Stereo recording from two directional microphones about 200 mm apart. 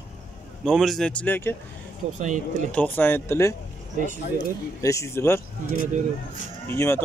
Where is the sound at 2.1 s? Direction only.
35° right (ahead or behind).